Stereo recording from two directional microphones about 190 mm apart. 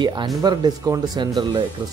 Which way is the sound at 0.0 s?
25° right (ahead or behind).